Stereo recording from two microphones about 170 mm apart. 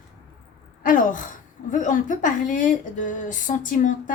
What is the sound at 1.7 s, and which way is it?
A woman's voice, 50° left (ahead or behind).